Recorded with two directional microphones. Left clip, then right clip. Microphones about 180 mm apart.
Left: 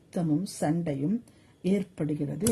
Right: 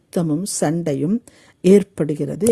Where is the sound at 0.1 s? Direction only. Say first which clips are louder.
Right 8 dB; 35° right (ahead or behind).